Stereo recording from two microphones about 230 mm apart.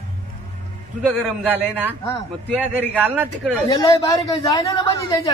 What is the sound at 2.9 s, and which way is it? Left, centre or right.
Speech, centre.